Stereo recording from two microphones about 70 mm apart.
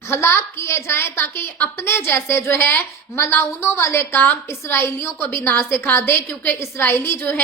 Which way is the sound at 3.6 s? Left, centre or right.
Left.